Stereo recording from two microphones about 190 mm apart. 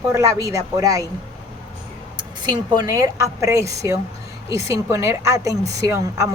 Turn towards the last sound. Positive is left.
turn(degrees=-15)  # may be behind; listen again after turning